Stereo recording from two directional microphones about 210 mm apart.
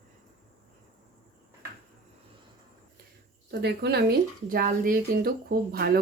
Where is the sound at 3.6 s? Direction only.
50° right (ahead or behind).